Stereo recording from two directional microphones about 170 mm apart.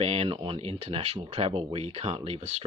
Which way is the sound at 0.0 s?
35° right (ahead or behind).